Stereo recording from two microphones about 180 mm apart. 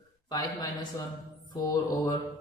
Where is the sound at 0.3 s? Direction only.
20° left (ahead or behind).